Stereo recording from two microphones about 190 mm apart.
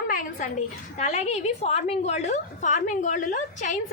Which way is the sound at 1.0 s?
35° left (ahead or behind).